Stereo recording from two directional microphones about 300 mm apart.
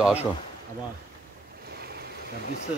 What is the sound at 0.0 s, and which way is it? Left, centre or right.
Speech, centre.